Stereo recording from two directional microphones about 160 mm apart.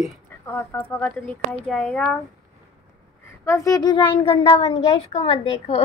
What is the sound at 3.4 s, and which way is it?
A child's voice, 20° left (ahead or behind).